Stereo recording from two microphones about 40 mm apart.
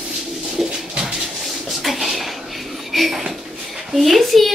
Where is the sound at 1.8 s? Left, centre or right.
Centre.